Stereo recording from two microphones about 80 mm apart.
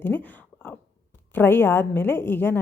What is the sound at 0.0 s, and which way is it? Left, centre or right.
A woman's voice, left.